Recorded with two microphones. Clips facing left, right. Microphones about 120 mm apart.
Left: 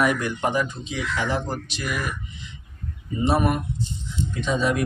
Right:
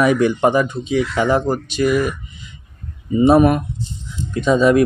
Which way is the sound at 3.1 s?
60° right (ahead or behind).